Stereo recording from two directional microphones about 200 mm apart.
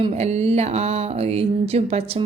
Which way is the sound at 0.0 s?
30° right (ahead or behind).